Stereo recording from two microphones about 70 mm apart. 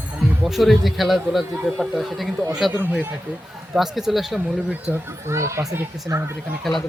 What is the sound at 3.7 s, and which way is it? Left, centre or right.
Speech, centre.